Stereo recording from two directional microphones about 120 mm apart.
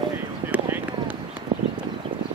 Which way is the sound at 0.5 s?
15° right (ahead or behind).